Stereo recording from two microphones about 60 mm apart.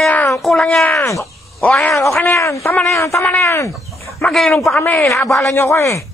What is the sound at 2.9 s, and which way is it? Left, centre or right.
Speech, left.